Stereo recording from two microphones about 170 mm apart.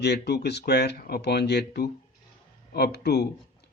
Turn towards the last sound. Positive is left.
turn(degrees=75)  # may be behind; listen again after turning